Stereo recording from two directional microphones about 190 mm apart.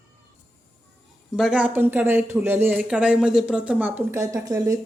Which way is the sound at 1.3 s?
Centre (ahead or behind).